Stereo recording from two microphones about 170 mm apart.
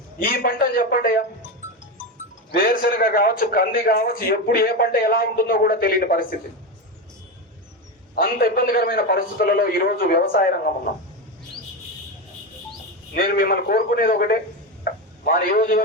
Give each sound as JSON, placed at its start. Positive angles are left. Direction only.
{"t": 0.2, "sound": "a man's voice", "side_deg": 60}
{"t": 2.5, "sound": "a man's voice", "side_deg": 60}
{"t": 8.1, "sound": "a man's voice", "side_deg": 60}
{"t": 13.1, "sound": "a man's voice", "side_deg": 60}